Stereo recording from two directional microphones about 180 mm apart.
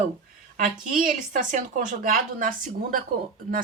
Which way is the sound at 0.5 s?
50° right (ahead or behind).